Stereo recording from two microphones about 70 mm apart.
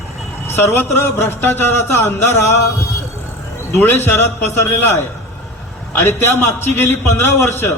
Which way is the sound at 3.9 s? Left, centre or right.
Left.